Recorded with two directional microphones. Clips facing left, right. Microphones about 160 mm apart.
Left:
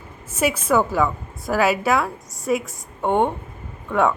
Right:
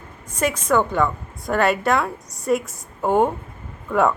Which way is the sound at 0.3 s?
5° left (ahead or behind).